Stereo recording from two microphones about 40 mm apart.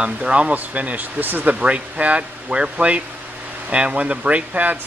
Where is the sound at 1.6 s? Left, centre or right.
Right.